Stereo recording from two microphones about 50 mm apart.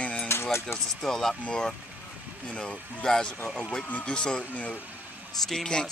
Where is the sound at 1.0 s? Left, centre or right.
Centre.